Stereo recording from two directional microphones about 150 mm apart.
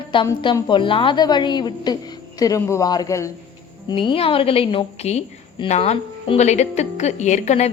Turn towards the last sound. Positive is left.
turn(degrees=50)  # may be behind; listen again after turning